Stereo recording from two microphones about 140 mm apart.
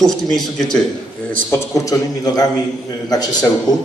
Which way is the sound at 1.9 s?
30° left (ahead or behind).